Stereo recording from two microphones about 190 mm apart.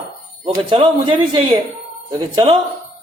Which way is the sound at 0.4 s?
25° right (ahead or behind).